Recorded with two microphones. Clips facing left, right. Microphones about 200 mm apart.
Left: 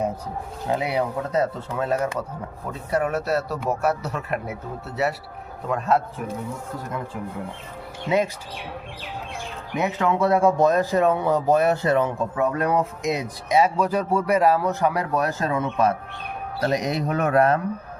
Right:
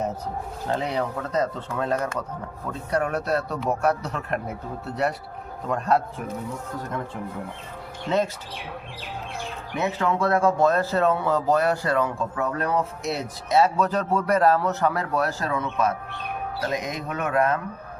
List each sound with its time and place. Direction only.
0.7 s speech: 10° left (ahead or behind)
8.0 s speech: 10° left (ahead or behind)
9.7 s speech: 20° left (ahead or behind)
16.6 s speech: 35° left (ahead or behind)